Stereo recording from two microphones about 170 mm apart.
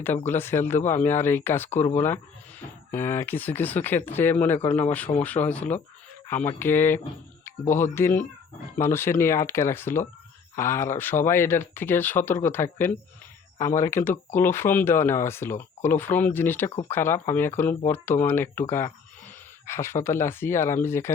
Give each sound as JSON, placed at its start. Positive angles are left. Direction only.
{"t": 0.3, "sound": "speech", "side_deg": 15}
{"t": 2.9, "sound": "speech", "side_deg": 15}